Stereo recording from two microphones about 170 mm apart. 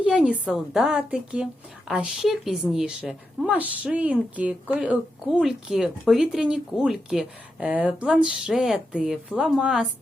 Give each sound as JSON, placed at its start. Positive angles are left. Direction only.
{"t": 0.0, "sound": "speech", "side_deg": -5}